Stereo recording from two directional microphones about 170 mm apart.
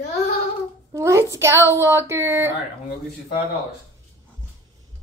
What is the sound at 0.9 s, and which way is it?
A woman's voice, 15° right (ahead or behind).